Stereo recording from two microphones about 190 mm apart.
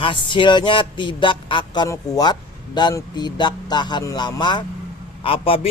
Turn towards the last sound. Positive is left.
turn(degrees=30)  # may be behind; listen again after turning